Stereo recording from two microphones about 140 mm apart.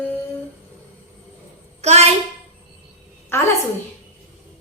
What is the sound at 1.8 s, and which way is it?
Speech, 50° right (ahead or behind).